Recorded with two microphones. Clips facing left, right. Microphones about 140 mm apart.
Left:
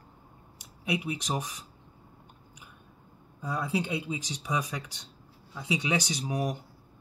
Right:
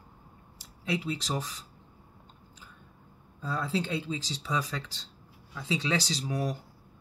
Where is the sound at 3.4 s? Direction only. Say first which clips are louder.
Left 1 dB; 15° left (ahead or behind).